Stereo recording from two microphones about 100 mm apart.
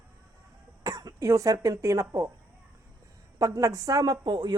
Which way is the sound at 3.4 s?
35° right (ahead or behind).